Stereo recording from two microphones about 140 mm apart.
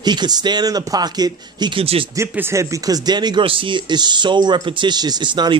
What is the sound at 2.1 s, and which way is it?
Speech, 20° right (ahead or behind).